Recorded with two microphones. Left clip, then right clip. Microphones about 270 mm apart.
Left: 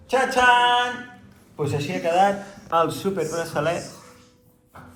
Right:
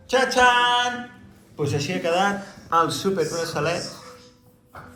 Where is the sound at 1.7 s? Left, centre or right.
Centre.